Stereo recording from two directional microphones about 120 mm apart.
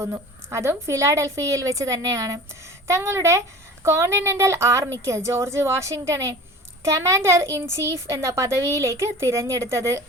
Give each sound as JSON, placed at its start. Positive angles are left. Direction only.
{"t": 0.0, "sound": "a woman's voice", "side_deg": -20}